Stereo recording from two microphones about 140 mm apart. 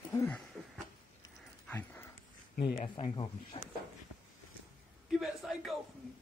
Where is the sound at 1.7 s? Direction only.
15° left (ahead or behind).